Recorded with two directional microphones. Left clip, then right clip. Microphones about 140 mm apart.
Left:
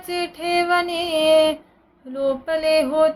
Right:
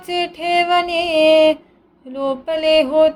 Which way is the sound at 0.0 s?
15° right (ahead or behind).